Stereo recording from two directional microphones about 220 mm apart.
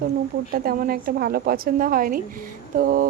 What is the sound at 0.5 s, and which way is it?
A woman's voice, 40° right (ahead or behind).